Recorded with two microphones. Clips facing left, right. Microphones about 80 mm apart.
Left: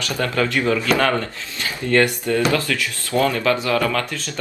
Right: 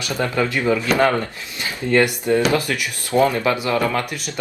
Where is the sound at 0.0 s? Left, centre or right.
Centre.